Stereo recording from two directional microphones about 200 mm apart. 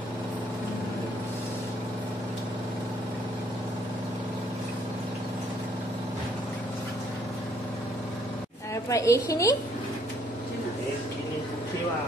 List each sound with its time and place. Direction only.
8.8 s a woman's voice: 15° left (ahead or behind)